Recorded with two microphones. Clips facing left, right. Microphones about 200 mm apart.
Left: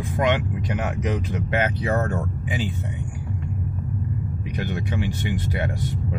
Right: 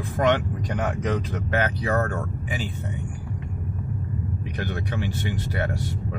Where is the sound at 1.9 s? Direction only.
20° left (ahead or behind).